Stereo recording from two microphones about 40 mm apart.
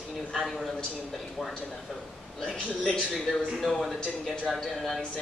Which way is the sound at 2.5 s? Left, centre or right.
Centre.